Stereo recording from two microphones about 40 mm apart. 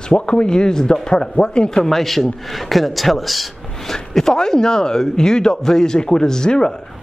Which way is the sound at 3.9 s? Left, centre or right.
Centre.